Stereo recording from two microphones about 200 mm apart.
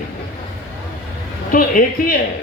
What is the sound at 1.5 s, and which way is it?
Speech, 45° left (ahead or behind).